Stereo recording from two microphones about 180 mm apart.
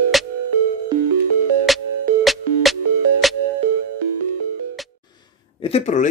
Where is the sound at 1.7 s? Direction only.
Centre (ahead or behind).